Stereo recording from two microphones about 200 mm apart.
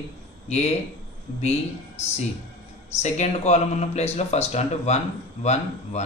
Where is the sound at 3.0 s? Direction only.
35° left (ahead or behind).